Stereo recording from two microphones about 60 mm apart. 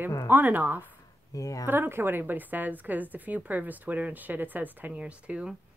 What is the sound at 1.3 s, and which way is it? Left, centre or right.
Speech, left.